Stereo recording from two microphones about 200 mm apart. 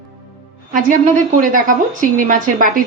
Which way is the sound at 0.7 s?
40° right (ahead or behind).